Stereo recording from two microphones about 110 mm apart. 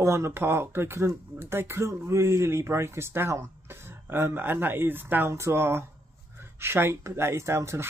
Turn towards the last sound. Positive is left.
turn(degrees=-25)  # may be behind; listen again after turning